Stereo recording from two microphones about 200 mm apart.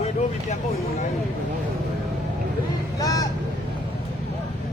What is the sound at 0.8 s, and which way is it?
Speech, 50° left (ahead or behind).